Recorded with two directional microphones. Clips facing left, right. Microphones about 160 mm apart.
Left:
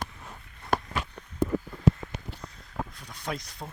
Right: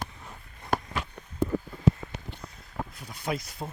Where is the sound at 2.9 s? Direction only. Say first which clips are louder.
Right 3 dB; 5° right (ahead or behind).